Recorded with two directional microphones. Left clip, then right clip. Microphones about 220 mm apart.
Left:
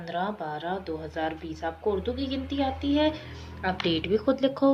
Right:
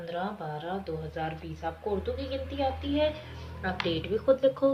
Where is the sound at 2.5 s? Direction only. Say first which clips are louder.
Left 3 dB; 50° left (ahead or behind).